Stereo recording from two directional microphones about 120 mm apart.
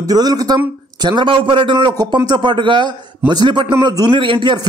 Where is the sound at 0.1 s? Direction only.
35° right (ahead or behind).